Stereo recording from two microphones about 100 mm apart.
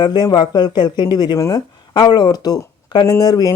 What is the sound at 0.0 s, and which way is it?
Speech, 45° left (ahead or behind).